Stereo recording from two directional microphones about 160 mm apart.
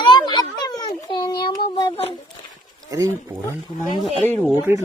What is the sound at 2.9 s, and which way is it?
Speech, 20° right (ahead or behind).